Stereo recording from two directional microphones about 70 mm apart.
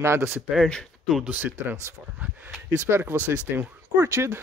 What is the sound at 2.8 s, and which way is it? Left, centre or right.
Speech, right.